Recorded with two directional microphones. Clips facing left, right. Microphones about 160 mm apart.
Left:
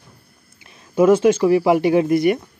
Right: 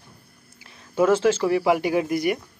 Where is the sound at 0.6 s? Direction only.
20° left (ahead or behind).